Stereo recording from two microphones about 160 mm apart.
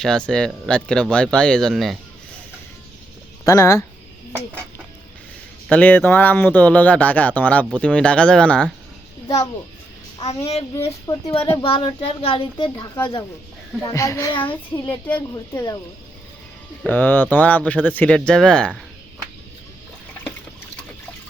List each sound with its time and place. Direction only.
0.0 s speech: 5° left (ahead or behind)
3.4 s a woman's voice: 20° left (ahead or behind)
5.6 s speech: 10° left (ahead or behind)
10.2 s a child's voice: 40° left (ahead or behind)
11.0 s a woman's voice: 20° left (ahead or behind)
11.6 s a child's voice: 35° left (ahead or behind)
13.8 s a woman's voice: 20° left (ahead or behind)
16.8 s speech: 10° left (ahead or behind)